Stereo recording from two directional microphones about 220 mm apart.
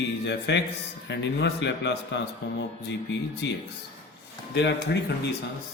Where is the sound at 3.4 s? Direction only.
55° left (ahead or behind).